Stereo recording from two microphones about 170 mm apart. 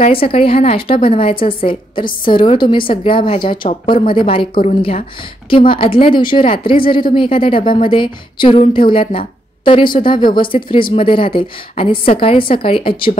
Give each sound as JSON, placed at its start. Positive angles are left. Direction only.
{"t": 0.0, "sound": "a woman's voice", "side_deg": 35}